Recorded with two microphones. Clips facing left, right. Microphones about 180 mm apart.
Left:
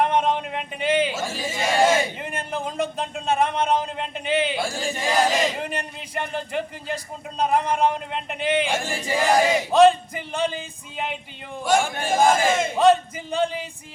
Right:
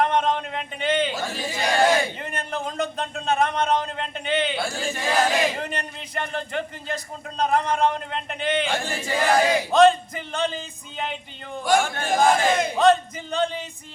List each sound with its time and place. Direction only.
0.0 s a sound: 10° left (ahead or behind)
2.1 s a man's voice: 5° left (ahead or behind)
5.3 s chant: centre (ahead or behind)
5.6 s a man's voice: 10° left (ahead or behind)
11.6 s chant: centre (ahead or behind)